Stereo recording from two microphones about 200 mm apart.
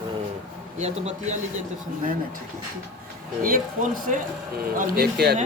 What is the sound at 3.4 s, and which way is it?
Speech, 45° right (ahead or behind).